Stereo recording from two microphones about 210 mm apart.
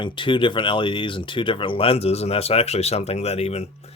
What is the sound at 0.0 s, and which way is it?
Speech, 25° left (ahead or behind).